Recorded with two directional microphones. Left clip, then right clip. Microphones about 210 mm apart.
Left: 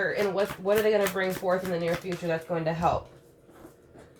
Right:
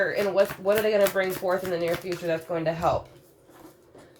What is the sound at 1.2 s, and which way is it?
Speech, 35° right (ahead or behind).